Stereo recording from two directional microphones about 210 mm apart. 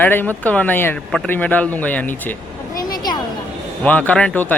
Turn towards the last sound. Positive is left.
turn(degrees=5)  # may be behind; listen again after turning